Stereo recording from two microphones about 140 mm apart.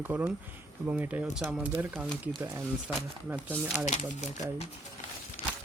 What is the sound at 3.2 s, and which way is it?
Speech, 15° right (ahead or behind).